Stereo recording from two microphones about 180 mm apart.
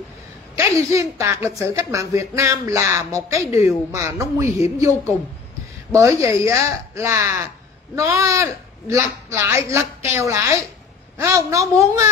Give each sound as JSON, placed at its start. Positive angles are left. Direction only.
{"t": 0.6, "sound": "speech", "side_deg": -15}